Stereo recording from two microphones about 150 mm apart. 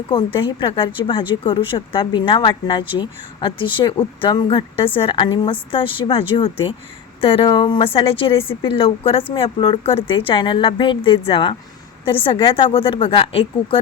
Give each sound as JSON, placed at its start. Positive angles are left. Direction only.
{"t": 0.3, "sound": "a woman's voice", "side_deg": 35}